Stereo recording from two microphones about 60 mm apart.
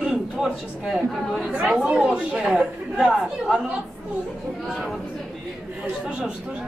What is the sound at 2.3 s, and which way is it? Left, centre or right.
Speech, centre.